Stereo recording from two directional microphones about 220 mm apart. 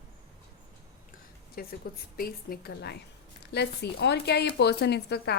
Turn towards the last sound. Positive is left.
turn(degrees=50)  # may be behind; listen again after turning